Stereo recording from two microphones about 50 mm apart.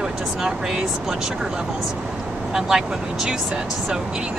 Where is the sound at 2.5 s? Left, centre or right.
Centre.